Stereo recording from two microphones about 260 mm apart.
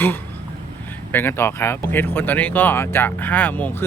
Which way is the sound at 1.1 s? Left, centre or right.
Centre.